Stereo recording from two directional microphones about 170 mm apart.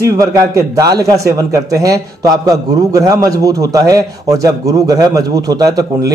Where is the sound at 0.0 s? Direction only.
20° right (ahead or behind).